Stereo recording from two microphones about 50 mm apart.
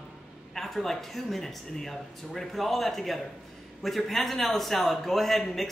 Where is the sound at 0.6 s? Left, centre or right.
Centre.